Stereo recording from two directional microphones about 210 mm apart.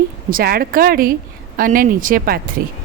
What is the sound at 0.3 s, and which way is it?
A woman's voice, 45° right (ahead or behind).